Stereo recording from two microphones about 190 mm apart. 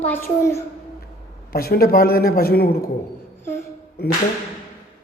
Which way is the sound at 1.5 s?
55° left (ahead or behind).